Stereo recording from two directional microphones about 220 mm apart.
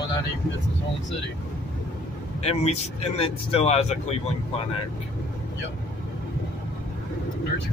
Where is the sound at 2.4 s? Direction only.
30° left (ahead or behind).